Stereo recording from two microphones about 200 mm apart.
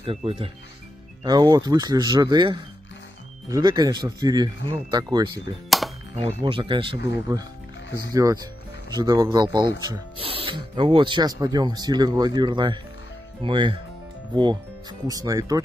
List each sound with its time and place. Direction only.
0.0 s speech: 30° right (ahead or behind)
5.7 s music: centre (ahead or behind)
6.4 s speech: 25° right (ahead or behind)